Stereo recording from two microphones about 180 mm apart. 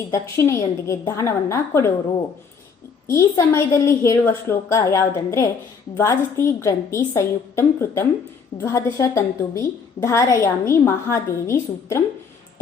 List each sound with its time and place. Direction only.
0.1 s a woman's voice: 15° left (ahead or behind)
3.1 s a woman's voice: 15° left (ahead or behind)